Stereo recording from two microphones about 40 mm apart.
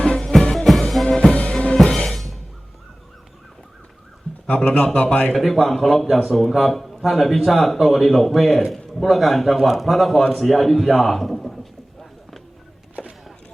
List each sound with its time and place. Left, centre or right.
0.2 s music: centre
1.3 s drum kit: left; by 2.4 s centre
4.4 s a man's voice: left
5.4 s a man's voice: centre